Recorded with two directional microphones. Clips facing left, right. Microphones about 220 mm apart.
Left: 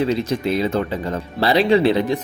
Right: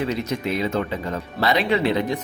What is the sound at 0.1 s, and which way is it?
Speech, 30° left (ahead or behind).